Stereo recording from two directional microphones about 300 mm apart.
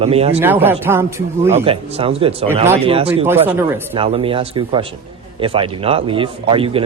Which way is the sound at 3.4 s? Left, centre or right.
Centre.